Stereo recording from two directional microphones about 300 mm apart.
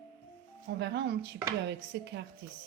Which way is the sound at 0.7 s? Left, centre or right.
Right.